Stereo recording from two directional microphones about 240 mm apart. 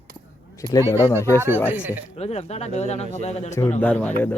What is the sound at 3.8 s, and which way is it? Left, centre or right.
Speech, centre.